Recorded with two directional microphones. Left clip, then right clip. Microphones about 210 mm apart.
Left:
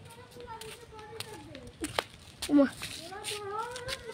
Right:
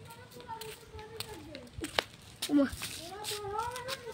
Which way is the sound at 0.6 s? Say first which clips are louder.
Even; centre (ahead or behind).